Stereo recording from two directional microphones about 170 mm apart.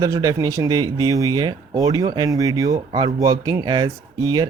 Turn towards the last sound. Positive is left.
turn(degrees=-25)  # may be behind; listen again after turning